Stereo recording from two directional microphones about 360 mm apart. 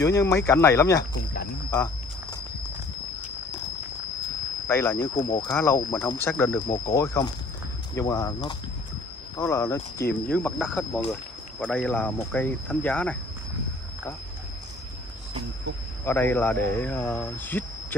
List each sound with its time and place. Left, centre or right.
0.0 s speech: centre
4.6 s speech: centre
16.1 s speech: centre